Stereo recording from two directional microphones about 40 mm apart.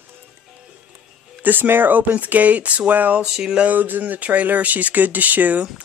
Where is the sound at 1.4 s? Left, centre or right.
Right.